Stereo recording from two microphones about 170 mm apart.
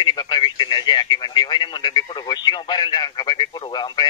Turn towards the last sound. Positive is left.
turn(degrees=25)  # may be behind; listen again after turning